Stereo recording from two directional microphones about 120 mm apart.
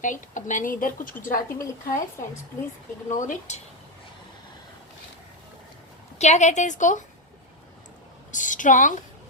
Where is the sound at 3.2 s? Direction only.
90° left.